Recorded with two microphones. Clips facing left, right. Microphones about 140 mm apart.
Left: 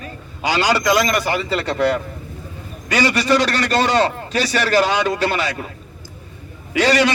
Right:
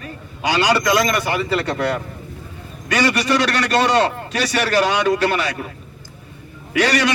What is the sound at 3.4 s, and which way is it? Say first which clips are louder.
A man's voice: right 1 dB; 30° left (ahead or behind).